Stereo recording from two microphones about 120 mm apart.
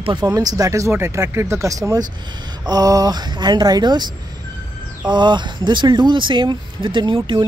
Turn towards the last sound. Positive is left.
turn(degrees=-45)  # may be behind; listen again after turning